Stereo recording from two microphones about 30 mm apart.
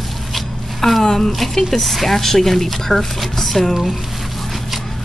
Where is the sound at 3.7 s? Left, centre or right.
Centre.